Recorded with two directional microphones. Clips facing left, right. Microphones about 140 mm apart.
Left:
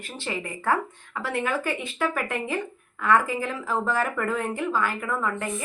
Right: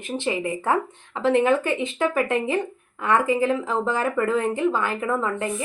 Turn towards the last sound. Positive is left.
turn(degrees=-20)  # may be behind; listen again after turning